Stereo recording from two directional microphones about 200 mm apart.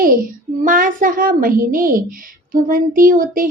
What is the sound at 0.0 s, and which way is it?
Speech, 45° right (ahead or behind).